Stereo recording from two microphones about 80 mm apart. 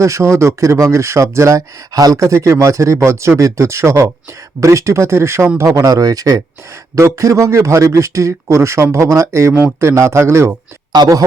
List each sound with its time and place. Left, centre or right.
0.0 s speech: right
5.6 s speech: right
10.9 s a man's voice: right